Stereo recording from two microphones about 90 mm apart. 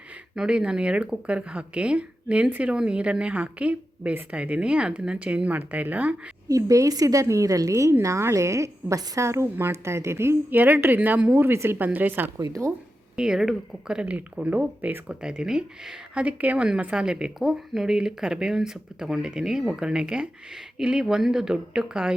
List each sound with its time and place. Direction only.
0.3 s speech: 10° right (ahead or behind)
6.5 s a woman's voice: 35° right (ahead or behind)
12.4 s a woman's voice: 35° right (ahead or behind)
13.1 s speech: 5° right (ahead or behind)